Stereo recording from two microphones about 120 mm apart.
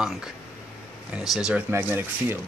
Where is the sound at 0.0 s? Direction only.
5° right (ahead or behind).